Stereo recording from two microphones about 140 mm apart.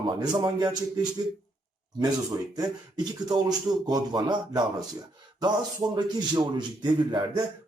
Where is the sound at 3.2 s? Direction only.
30° right (ahead or behind).